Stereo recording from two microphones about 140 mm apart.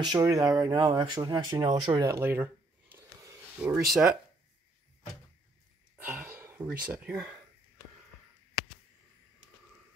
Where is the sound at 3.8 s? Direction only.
Centre (ahead or behind).